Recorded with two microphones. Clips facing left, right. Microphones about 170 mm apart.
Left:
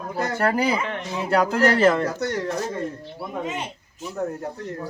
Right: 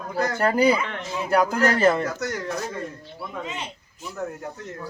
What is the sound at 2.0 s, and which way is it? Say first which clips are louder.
Speech: left 3 dB; 30° left (ahead or behind).